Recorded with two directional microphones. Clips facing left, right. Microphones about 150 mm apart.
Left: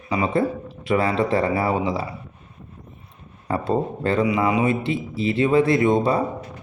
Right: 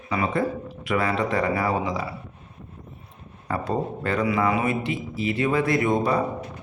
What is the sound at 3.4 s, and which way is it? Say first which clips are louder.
A man's voice: left 4 dB; 25° left (ahead or behind).